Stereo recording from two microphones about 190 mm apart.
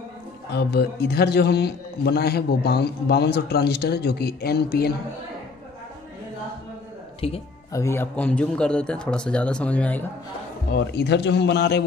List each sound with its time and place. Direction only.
0.5 s a man's voice: 60° left (ahead or behind)
7.2 s speech: 30° left (ahead or behind)
7.7 s a man's voice: 15° left (ahead or behind)
10.7 s a man's voice: 60° left (ahead or behind)